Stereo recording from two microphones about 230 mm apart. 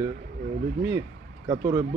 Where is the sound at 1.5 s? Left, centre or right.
Centre.